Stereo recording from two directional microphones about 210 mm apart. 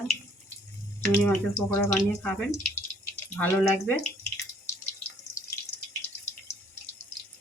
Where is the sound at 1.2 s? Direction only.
10° left (ahead or behind).